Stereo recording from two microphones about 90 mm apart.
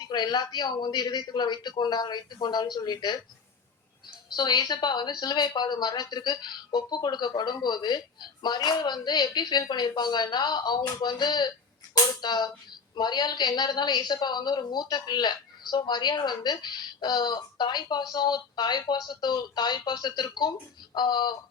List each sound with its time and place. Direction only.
0.0 s a woman's voice: 50° left (ahead or behind)
4.3 s a woman's voice: 50° left (ahead or behind)